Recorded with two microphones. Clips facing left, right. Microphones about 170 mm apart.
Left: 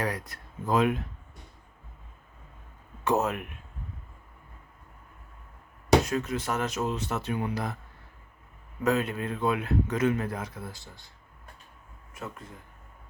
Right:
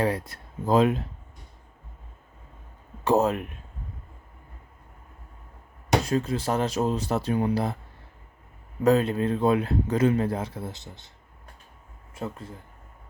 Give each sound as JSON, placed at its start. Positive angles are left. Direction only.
{"t": 0.0, "sound": "speech", "side_deg": -30}
{"t": 3.0, "sound": "speech", "side_deg": -30}
{"t": 6.1, "sound": "speech", "side_deg": -30}
{"t": 8.8, "sound": "speech", "side_deg": -30}
{"t": 12.1, "sound": "speech", "side_deg": -30}